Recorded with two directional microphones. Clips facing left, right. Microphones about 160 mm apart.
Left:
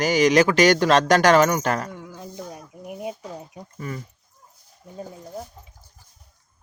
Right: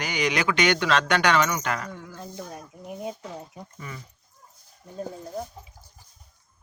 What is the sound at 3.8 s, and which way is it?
Speech, 45° left (ahead or behind).